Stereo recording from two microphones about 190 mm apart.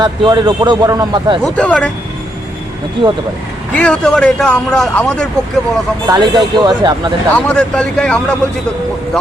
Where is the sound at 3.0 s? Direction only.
25° right (ahead or behind).